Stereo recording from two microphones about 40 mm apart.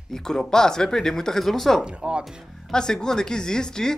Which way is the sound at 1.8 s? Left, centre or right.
Right.